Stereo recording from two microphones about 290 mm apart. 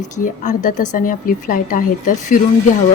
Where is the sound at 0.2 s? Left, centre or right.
Left.